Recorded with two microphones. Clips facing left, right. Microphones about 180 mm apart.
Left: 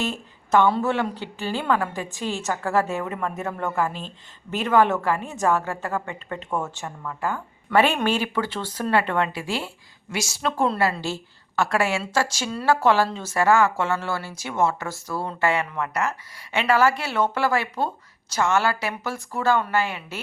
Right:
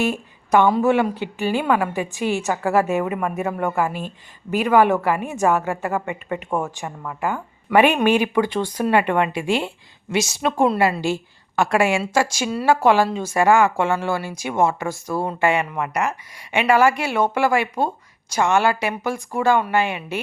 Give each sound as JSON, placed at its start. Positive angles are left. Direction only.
{"t": 0.0, "sound": "a woman's voice", "side_deg": -15}